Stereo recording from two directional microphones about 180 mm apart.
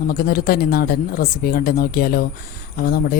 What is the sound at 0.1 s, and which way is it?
Speech, 55° left (ahead or behind).